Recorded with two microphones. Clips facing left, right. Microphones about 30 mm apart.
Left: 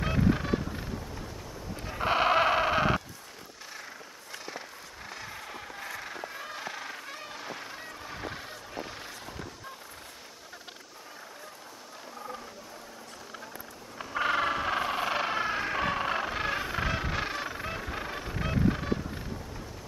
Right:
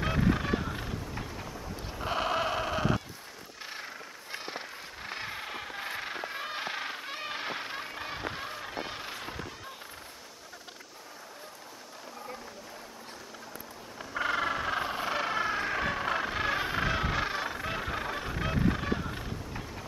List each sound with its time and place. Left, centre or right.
0.3 s honk: centre
0.7 s vehicle: right
2.0 s sheep: left
4.3 s a sound: right
13.9 s vehicle: centre
16.6 s music: centre
17.6 s music: centre
17.9 s music: centre
18.3 s honk: centre
18.9 s horse: right